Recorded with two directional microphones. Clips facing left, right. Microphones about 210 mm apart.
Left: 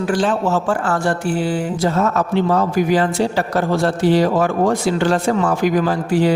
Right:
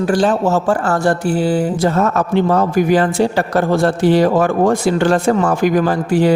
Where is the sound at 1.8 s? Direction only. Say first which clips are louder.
Left 1 dB; 50° right (ahead or behind).